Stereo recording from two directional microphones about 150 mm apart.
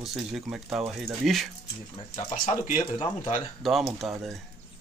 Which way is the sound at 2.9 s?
35° left (ahead or behind).